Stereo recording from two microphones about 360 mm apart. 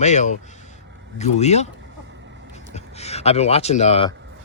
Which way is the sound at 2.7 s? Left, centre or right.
Centre.